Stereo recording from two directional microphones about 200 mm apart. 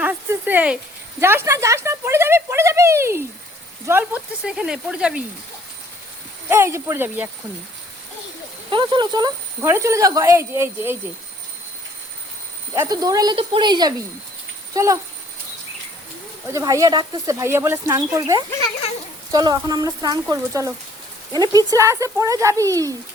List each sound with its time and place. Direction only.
0.0 s speech: 10° right (ahead or behind)
6.5 s speech: 15° right (ahead or behind)
8.7 s speech: 25° right (ahead or behind)
12.7 s speech: 15° right (ahead or behind)
16.5 s speech: 15° right (ahead or behind)